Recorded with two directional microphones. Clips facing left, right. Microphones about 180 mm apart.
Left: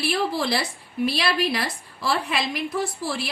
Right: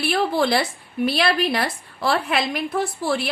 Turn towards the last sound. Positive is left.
turn(degrees=-60)  # may be behind; listen again after turning